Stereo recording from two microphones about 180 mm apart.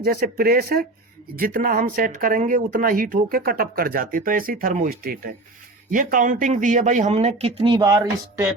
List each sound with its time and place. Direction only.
0.0 s speech: 60° right (ahead or behind); by 8.4 s 20° right (ahead or behind)